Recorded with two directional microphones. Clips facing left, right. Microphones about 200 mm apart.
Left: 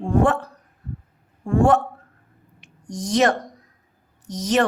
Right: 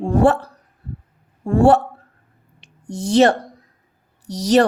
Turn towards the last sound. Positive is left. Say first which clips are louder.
# right 5 dB
turn(degrees=-35)  # may be behind; listen again after turning